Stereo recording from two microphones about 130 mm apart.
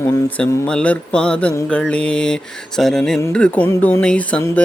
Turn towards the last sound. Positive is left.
turn(degrees=10)  # may be behind; listen again after turning